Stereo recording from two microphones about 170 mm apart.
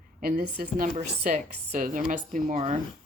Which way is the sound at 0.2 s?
60° right (ahead or behind).